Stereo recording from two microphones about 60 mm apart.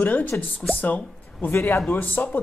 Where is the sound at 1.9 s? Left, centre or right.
Left.